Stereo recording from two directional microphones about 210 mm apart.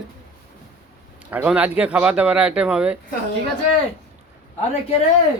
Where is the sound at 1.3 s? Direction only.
5° right (ahead or behind).